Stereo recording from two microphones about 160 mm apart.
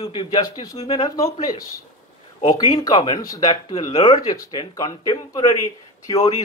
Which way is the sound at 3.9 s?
35° left (ahead or behind).